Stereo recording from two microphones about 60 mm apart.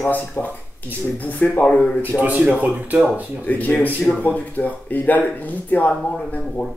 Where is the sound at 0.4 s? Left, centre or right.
Left.